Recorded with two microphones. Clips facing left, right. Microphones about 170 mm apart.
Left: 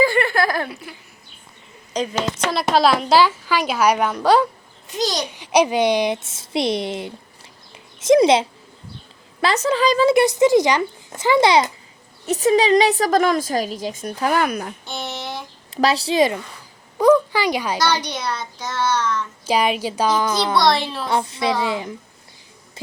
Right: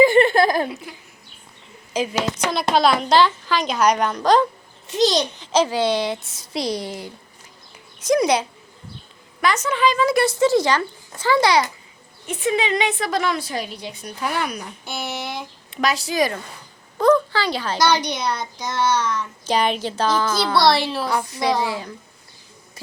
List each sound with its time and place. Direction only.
0.0 s a sound: 20° right (ahead or behind)
1.9 s a child's voice: 10° right (ahead or behind); by 4.4 s 10° left (ahead or behind)
4.9 s a child's voice: 25° right (ahead or behind)
5.3 s a woman's voice: 15° left (ahead or behind); by 10.1 s 35° left (ahead or behind)
10.1 s speech: 20° left (ahead or behind)
12.2 s a woman's voice: 40° left (ahead or behind)
14.8 s a sound: 10° right (ahead or behind)
15.7 s a woman's voice: 30° left (ahead or behind)
17.0 s a sound: 15° left (ahead or behind)
17.7 s a child's voice: 10° right (ahead or behind)
19.5 s a woman's voice: 5° left (ahead or behind)
20.7 s a child's voice: 10° right (ahead or behind)
21.0 s speech: 25° left (ahead or behind)